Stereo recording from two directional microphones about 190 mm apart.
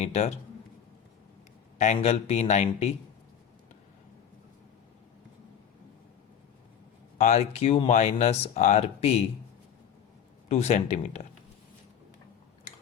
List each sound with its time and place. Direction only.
0.0 s speech: 35° left (ahead or behind)
1.8 s speech: 35° left (ahead or behind)
7.2 s speech: 35° left (ahead or behind)
10.5 s speech: 35° left (ahead or behind)